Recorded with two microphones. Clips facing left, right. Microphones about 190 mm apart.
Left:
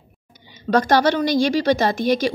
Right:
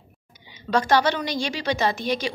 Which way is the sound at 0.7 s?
45° left (ahead or behind).